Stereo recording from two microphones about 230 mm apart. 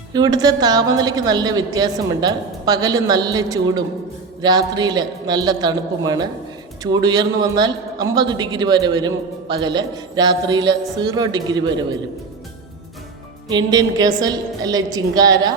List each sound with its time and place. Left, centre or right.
0.1 s a man's voice: centre
13.5 s a man's voice: centre